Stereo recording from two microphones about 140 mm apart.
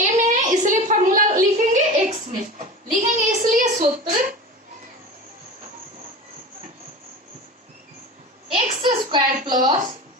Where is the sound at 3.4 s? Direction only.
65° right (ahead or behind).